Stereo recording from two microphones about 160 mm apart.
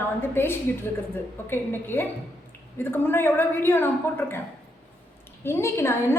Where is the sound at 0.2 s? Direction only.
15° left (ahead or behind).